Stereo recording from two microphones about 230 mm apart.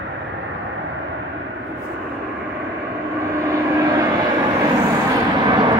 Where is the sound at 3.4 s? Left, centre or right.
Centre.